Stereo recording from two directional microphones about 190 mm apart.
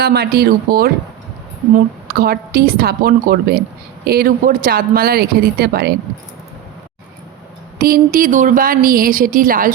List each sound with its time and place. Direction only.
0.0 s speech: 55° right (ahead or behind)
2.0 s speech: 55° right (ahead or behind)
7.8 s speech: 50° right (ahead or behind)